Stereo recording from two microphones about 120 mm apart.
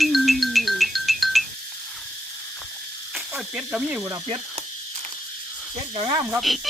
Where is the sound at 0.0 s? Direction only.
Centre (ahead or behind).